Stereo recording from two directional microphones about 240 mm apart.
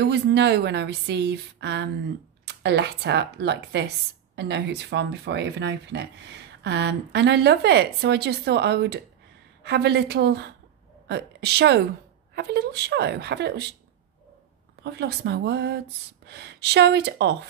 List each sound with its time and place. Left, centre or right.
0.0 s a woman's voice: right
14.8 s a woman's voice: right